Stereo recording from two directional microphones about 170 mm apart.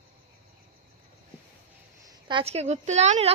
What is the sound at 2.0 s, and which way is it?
A woman's voice, 30° right (ahead or behind).